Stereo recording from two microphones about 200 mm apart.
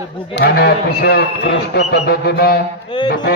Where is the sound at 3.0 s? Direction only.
60° left (ahead or behind).